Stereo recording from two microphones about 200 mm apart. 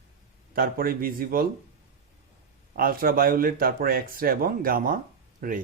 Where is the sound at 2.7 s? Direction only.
45° right (ahead or behind).